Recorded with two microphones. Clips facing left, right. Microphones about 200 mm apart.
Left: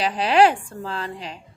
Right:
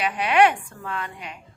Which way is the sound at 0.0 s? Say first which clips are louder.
Left 2 dB; 30° left (ahead or behind).